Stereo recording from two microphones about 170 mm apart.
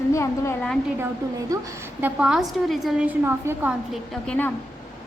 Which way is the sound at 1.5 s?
20° right (ahead or behind).